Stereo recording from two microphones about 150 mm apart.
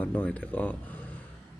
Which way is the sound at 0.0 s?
10° left (ahead or behind).